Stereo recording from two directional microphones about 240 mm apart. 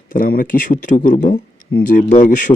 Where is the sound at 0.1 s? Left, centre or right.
Left.